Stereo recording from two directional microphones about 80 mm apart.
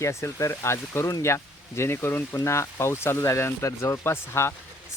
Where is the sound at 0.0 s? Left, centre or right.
Left.